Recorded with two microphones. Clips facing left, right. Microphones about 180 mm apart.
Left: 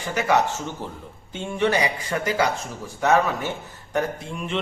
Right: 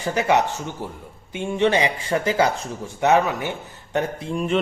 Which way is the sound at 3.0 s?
15° right (ahead or behind).